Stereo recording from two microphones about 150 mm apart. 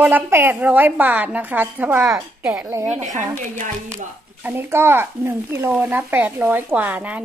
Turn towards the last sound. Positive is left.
turn(degrees=-10)  # may be behind; listen again after turning